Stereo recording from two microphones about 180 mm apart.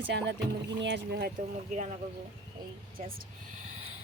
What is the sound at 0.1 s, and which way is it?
Speech, 70° right (ahead or behind).